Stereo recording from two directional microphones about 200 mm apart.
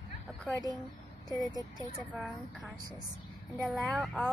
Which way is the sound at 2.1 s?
5° right (ahead or behind).